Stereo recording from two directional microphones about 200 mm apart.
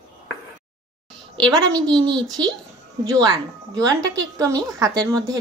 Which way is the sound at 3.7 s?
15° right (ahead or behind).